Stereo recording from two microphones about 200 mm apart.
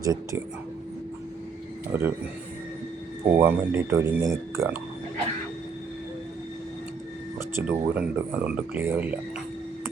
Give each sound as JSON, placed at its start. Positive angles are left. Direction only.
{"t": 0.0, "sound": "speech", "side_deg": -15}
{"t": 1.9, "sound": "speech", "side_deg": -10}
{"t": 3.2, "sound": "speech", "side_deg": -10}
{"t": 7.3, "sound": "speech", "side_deg": -10}